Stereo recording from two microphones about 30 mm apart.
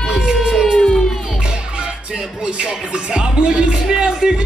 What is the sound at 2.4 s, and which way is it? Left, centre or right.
Speech, right.